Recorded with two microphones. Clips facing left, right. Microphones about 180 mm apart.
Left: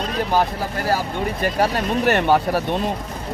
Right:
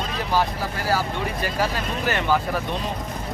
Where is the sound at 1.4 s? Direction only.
60° left (ahead or behind).